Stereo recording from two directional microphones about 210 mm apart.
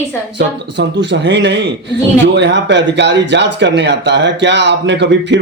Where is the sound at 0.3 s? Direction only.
55° right (ahead or behind).